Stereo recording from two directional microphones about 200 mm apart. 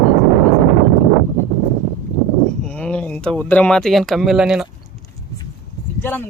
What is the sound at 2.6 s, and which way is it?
Speech, 5° left (ahead or behind).